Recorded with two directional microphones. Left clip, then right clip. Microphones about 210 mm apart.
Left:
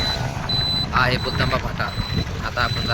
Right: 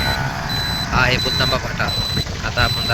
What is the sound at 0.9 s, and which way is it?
Speech, 15° left (ahead or behind).